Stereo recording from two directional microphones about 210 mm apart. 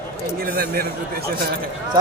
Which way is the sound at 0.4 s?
50° right (ahead or behind).